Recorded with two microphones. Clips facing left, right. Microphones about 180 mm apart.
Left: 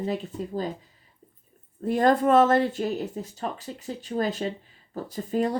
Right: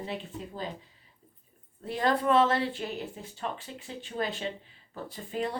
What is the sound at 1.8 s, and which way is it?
Speech, 45° left (ahead or behind).